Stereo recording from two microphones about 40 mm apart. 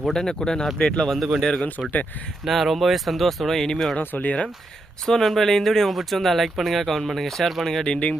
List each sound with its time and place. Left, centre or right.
0.0 s speech: centre
1.6 s speech: left
2.4 s speech: centre
4.0 s speech: left
5.0 s speech: centre
7.9 s speech: left